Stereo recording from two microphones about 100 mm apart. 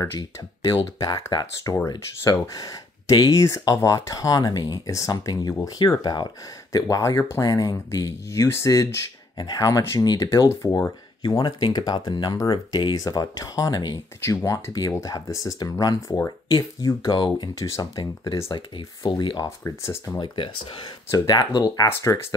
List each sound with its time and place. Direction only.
0.9 s speech: 40° left (ahead or behind)
2.4 s speech: 35° left (ahead or behind)
6.7 s speech: 35° left (ahead or behind)
9.4 s speech: 45° left (ahead or behind)
10.5 s speech: 30° left (ahead or behind)
11.2 s speech: 50° left (ahead or behind)
14.2 s speech: 30° left (ahead or behind)
18.8 s speech: 55° left (ahead or behind)
19.4 s speech: 30° left (ahead or behind)
20.2 s speech: 60° left (ahead or behind)
21.1 s speech: 40° left (ahead or behind)